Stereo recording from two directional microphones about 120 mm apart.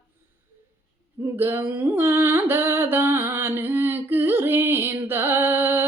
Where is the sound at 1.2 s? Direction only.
20° right (ahead or behind).